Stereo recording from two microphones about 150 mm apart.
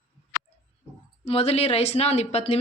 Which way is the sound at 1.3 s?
40° left (ahead or behind).